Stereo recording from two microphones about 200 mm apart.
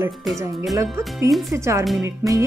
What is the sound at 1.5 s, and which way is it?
Speech, 15° right (ahead or behind).